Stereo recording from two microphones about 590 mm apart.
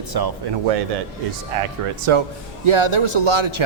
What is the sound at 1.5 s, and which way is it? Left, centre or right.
A man's voice, right.